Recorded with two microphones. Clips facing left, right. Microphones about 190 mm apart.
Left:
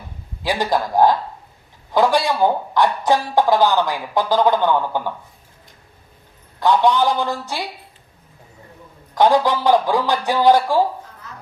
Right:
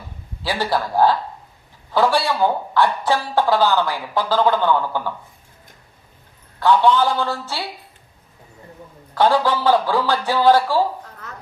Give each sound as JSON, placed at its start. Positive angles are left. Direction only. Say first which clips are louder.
{"t": 0.4, "sound": "speech", "louder": "left 2 dB", "side_deg": 15}
{"t": 6.6, "sound": "speech", "louder": "even", "side_deg": 15}
{"t": 9.1, "sound": "speech", "louder": "left 2 dB", "side_deg": 15}